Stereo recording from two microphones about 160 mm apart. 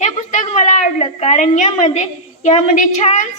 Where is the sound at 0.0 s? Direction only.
50° left (ahead or behind).